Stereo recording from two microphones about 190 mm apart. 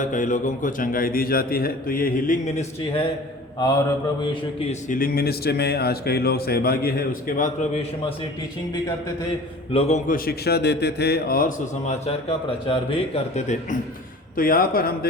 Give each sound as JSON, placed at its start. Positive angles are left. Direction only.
{"t": 0.0, "sound": "a man's voice", "side_deg": 40}
{"t": 3.6, "sound": "mantra", "side_deg": 20}
{"t": 4.7, "sound": "speech", "side_deg": 45}
{"t": 9.7, "sound": "speech", "side_deg": 35}
{"t": 10.2, "sound": "speech", "side_deg": 55}
{"t": 14.3, "sound": "a man's voice", "side_deg": 50}